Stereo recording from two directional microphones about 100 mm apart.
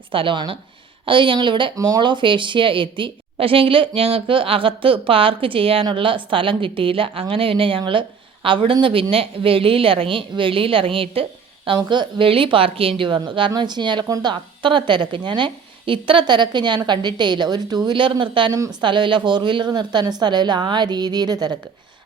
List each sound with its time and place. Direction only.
0.1 s a woman's voice: 60° right (ahead or behind)
1.7 s a woman's voice: 40° right (ahead or behind)